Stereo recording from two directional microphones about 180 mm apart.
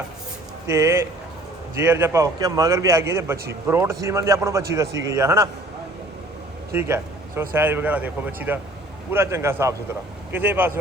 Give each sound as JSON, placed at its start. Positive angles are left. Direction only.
{"t": 0.7, "sound": "a man's voice", "side_deg": -15}
{"t": 6.7, "sound": "a man's voice", "side_deg": -15}